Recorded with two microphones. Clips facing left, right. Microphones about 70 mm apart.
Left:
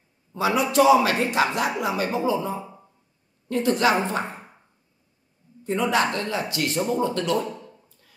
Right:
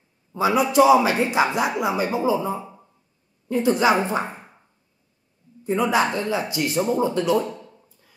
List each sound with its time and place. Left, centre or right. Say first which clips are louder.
0.3 s speech: right 3 dB; centre
5.7 s speech: right 2 dB; centre